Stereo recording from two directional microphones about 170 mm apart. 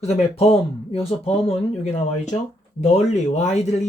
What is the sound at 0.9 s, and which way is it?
Speech, 35° left (ahead or behind).